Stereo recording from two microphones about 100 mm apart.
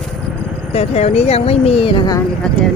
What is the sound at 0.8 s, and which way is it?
Speech, 90° left.